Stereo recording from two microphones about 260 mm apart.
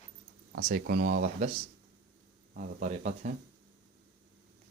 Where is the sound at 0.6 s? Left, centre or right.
Right.